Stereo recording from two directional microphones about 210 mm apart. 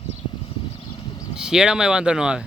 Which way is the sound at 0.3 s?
25° left (ahead or behind).